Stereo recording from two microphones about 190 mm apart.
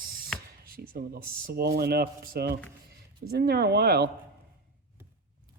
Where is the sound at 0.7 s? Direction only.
50° right (ahead or behind).